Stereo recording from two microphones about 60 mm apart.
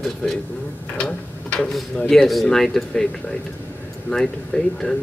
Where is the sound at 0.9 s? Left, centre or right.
Centre.